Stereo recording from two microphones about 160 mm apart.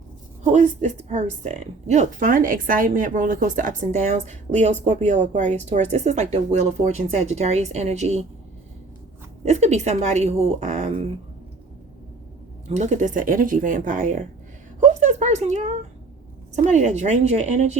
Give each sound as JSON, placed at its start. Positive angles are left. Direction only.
{"t": 0.4, "sound": "speech", "side_deg": -45}
{"t": 9.4, "sound": "speech", "side_deg": -45}
{"t": 12.6, "sound": "speech", "side_deg": -45}